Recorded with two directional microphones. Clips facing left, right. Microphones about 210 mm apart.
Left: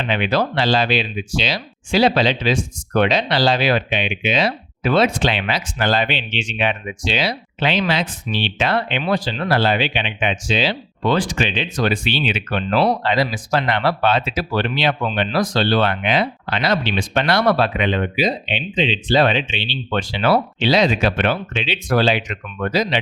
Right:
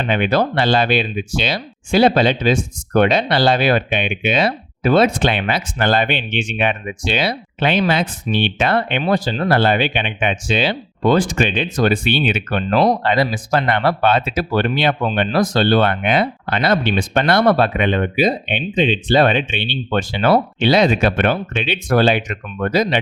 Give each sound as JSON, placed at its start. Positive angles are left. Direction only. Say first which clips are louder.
{"t": 0.0, "sound": "speech", "louder": "right 3 dB", "side_deg": -50}